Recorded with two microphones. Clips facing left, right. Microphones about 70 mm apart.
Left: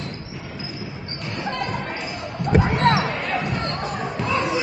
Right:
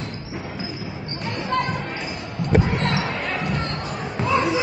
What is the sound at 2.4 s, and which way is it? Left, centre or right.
Basketball bounce, left.